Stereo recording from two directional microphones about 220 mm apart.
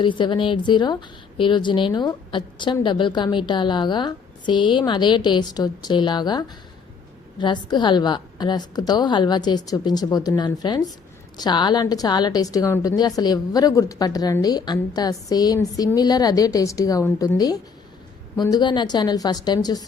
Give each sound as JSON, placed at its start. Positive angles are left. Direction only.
{"t": 0.0, "sound": "a woman's voice", "side_deg": 20}